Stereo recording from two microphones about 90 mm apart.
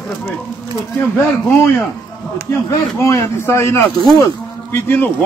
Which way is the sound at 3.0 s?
30° left (ahead or behind).